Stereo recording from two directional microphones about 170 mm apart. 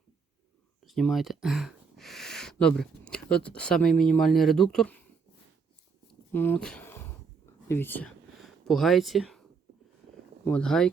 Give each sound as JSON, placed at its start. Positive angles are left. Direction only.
{"t": 0.9, "sound": "speech", "side_deg": 0}
{"t": 3.8, "sound": "speech", "side_deg": 50}
{"t": 4.1, "sound": "speech", "side_deg": 0}
{"t": 6.3, "sound": "speech", "side_deg": 10}
{"t": 10.4, "sound": "speech", "side_deg": 5}